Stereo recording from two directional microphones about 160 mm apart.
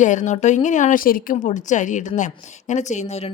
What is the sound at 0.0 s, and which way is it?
A woman's voice, 50° left (ahead or behind).